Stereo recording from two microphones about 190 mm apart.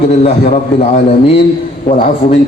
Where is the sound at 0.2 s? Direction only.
35° left (ahead or behind).